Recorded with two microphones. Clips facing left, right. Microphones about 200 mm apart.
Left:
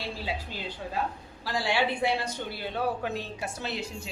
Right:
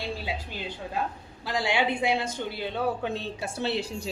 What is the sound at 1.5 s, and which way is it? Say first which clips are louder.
A man's voice: right 1 dB; 20° right (ahead or behind).